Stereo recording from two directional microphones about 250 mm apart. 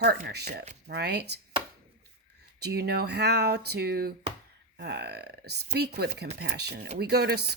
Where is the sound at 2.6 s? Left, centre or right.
Right.